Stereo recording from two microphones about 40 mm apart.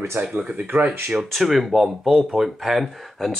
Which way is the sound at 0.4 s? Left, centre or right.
Right.